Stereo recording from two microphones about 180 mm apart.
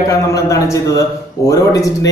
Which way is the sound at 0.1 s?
15° left (ahead or behind).